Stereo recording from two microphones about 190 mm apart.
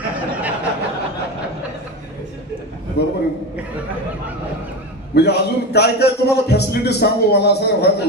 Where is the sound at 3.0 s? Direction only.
60° left (ahead or behind).